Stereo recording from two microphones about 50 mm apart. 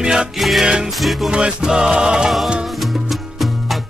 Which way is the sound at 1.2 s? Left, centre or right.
Centre.